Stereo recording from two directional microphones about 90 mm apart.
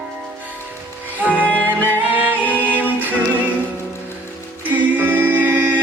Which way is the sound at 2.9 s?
20° right (ahead or behind).